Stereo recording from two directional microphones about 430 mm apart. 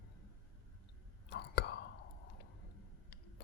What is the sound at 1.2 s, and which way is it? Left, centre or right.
Whispering, left.